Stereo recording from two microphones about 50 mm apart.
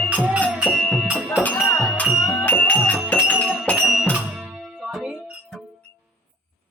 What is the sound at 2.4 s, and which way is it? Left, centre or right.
Music, left.